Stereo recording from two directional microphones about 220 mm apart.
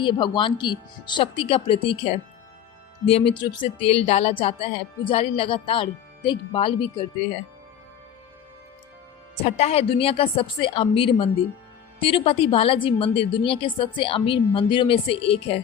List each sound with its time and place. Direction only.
0.0 s a woman's voice: 20° left (ahead or behind)
9.3 s a woman's voice: 30° left (ahead or behind)